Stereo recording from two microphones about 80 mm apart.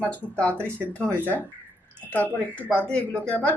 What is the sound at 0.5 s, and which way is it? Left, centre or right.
Speech, right.